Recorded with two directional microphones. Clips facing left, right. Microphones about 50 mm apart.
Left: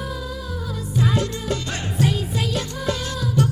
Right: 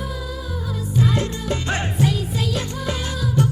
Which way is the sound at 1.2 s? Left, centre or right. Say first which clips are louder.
Even; right.